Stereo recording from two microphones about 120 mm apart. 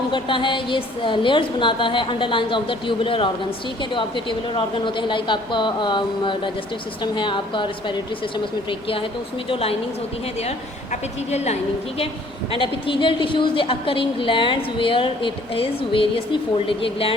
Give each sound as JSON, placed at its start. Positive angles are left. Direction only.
{"t": 0.1, "sound": "a woman's voice", "side_deg": 45}
{"t": 9.5, "sound": "a woman's voice", "side_deg": 50}
{"t": 11.3, "sound": "a woman's voice", "side_deg": 65}
{"t": 12.5, "sound": "a woman's voice", "side_deg": 45}